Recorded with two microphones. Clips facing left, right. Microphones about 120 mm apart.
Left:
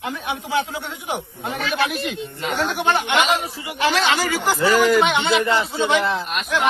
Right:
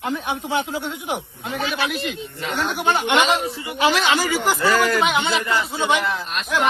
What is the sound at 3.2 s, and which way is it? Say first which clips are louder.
Speech: right 2 dB; 30° right (ahead or behind).